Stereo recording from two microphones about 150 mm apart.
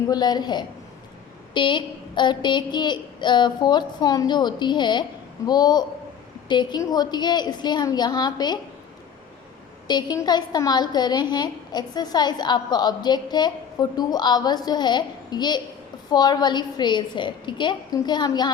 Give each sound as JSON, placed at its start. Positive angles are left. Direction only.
{"t": 0.1, "sound": "a woman's voice", "side_deg": 25}
{"t": 9.8, "sound": "a woman's voice", "side_deg": 25}